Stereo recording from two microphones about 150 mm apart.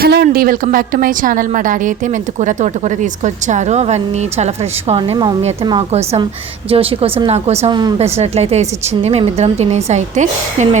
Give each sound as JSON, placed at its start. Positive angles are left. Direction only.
{"t": 0.0, "sound": "a woman's voice", "side_deg": -85}
{"t": 4.9, "sound": "a woman's voice", "side_deg": -30}
{"t": 6.7, "sound": "a woman's voice", "side_deg": -40}
{"t": 7.7, "sound": "speech", "side_deg": -30}
{"t": 7.9, "sound": "a woman's voice", "side_deg": -45}